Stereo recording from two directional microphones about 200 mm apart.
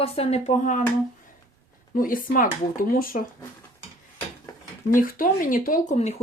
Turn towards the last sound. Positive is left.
turn(degrees=35)  # may be behind; listen again after turning